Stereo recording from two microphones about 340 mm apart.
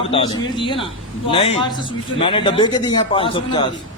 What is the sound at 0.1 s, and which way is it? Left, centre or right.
A man's voice, centre.